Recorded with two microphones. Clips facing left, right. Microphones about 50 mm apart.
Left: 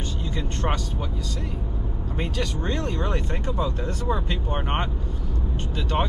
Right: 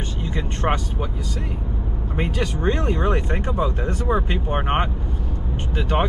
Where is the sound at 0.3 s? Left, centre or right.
Right.